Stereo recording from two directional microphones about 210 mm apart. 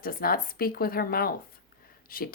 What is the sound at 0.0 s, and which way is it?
Speech, 45° left (ahead or behind).